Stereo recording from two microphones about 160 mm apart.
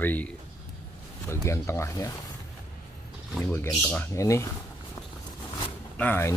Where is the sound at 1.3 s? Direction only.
15° left (ahead or behind).